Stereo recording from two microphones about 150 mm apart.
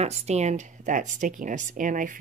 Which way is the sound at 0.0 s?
45° right (ahead or behind).